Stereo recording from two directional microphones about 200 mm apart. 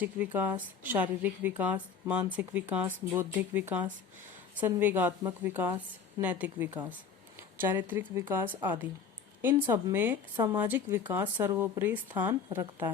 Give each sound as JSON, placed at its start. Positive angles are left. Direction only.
{"t": 0.0, "sound": "speech", "side_deg": -10}
{"t": 10.3, "sound": "a woman's voice", "side_deg": -20}
{"t": 10.9, "sound": "speech", "side_deg": -10}